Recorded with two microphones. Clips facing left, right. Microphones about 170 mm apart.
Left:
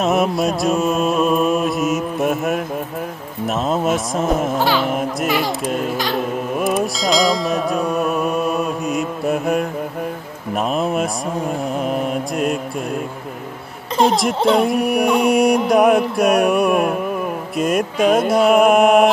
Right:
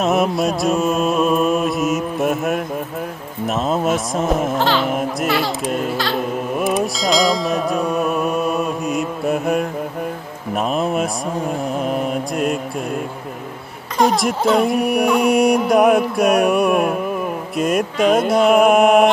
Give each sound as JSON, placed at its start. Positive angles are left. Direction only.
{"t": 0.0, "sound": "mantra", "side_deg": 0}
{"t": 3.4, "sound": "music", "side_deg": 0}
{"t": 4.6, "sound": "speech", "side_deg": 15}
{"t": 4.8, "sound": "music", "side_deg": 0}
{"t": 14.0, "sound": "music", "side_deg": 0}